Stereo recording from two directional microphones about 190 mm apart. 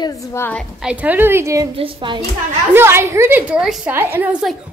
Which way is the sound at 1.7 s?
25° right (ahead or behind).